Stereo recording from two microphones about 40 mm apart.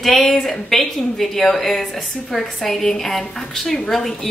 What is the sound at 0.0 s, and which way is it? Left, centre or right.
A woman's voice, centre.